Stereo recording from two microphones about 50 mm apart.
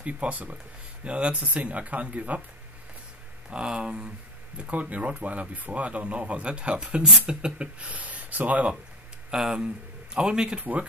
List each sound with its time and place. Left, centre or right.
0.0 s speech: right
3.4 s speech: centre
9.3 s speech: centre
10.6 s speech: right